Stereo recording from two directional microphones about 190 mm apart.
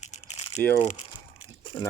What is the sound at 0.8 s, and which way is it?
Speech, 35° left (ahead or behind).